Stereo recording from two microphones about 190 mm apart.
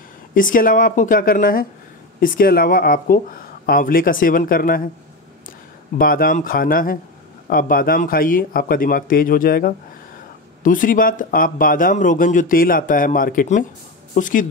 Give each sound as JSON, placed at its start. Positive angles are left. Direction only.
{"t": 0.3, "sound": "speech", "side_deg": 45}
{"t": 5.9, "sound": "speech", "side_deg": 50}